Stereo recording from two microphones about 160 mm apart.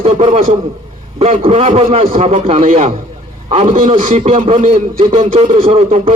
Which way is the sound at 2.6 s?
60° right (ahead or behind).